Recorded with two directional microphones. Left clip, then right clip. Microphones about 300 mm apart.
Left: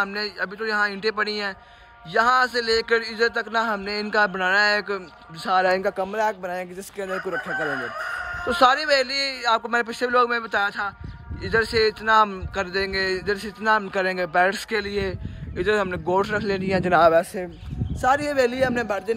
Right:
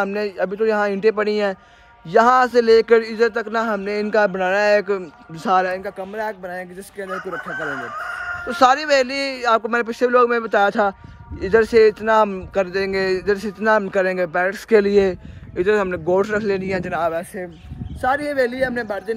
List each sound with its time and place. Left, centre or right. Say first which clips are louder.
0.0 s speech: right 4 dB; centre
5.7 s speech: left 4 dB; left
6.1 s speech: left 2 dB; centre
8.5 s speech: right 3 dB; centre
16.9 s speech: left 8 dB; left
18.0 s speech: right 1 dB; centre